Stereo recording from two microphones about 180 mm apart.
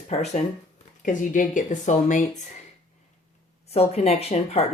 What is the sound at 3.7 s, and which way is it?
Speech, 35° left (ahead or behind).